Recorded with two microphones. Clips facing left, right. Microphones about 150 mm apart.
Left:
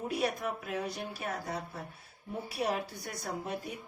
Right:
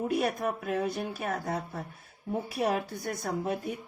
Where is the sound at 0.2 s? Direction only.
50° right (ahead or behind).